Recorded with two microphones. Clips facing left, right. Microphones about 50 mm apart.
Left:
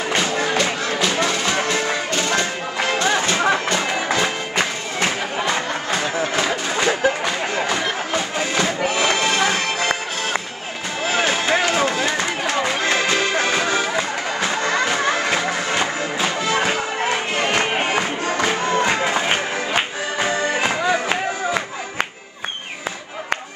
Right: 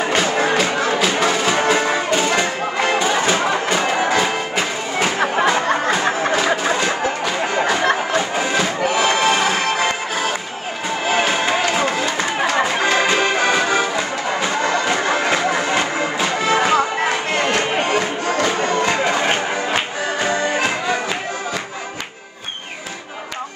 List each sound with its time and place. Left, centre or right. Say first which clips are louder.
0.9 s music: right 1 dB; centre
6.3 s music: right 4 dB; centre
11.1 s a sound: right 1 dB; centre
12.8 s accordion: right 3 dB; centre
14.4 s music: even; centre
16.4 s music: right 4 dB; centre
17.5 s music: even; centre